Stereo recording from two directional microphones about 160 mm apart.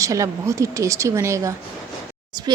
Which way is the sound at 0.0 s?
20° right (ahead or behind).